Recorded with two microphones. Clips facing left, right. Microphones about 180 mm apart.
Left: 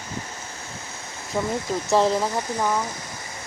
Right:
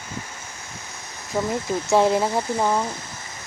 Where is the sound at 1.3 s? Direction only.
5° right (ahead or behind).